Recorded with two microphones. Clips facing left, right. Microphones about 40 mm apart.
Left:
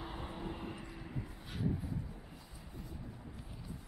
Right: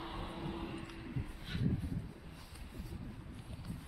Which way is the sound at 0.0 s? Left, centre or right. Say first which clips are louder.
Even; centre.